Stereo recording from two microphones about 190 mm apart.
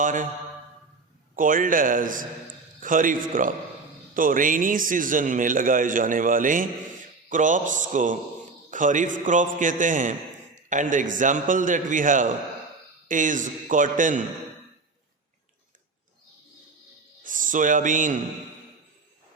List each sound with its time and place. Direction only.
0.0 s a man's voice: 45° right (ahead or behind)
1.4 s a man's voice: 45° right (ahead or behind)
17.2 s speech: 45° right (ahead or behind)